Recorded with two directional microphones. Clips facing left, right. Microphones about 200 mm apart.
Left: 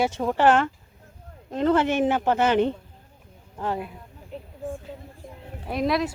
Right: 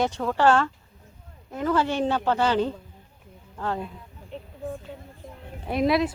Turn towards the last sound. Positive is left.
turn(degrees=0)  # may be behind; listen again after turning